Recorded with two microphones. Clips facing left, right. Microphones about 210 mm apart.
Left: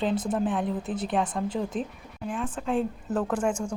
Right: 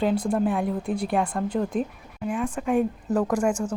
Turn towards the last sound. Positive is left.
turn(degrees=-10)  # may be behind; listen again after turning